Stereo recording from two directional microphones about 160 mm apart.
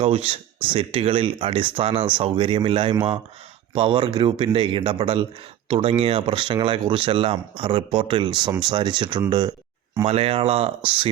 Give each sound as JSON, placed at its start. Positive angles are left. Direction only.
{"t": 0.0, "sound": "speech", "side_deg": -35}